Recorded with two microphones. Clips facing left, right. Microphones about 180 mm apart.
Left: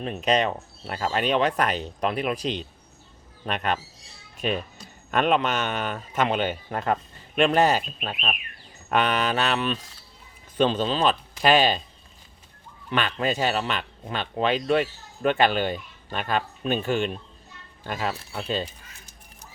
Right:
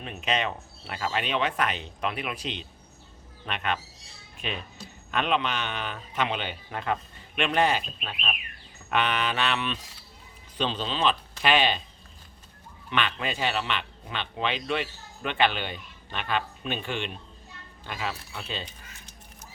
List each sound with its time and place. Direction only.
0.0 s a man's voice: 40° left (ahead or behind)
12.9 s a man's voice: 40° left (ahead or behind)